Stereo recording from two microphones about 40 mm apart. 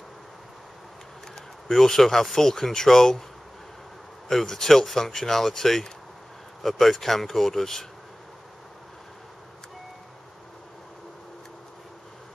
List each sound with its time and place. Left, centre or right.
1.3 s speech: centre
4.3 s speech: centre